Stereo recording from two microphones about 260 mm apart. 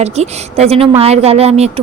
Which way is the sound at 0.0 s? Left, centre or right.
Right.